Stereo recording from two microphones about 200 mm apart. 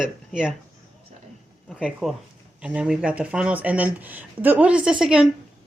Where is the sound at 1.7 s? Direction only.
Centre (ahead or behind).